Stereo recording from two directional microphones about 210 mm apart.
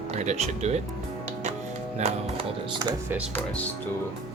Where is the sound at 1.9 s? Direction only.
30° right (ahead or behind).